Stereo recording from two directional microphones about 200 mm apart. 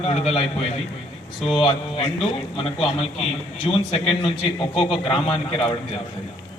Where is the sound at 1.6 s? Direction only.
25° left (ahead or behind).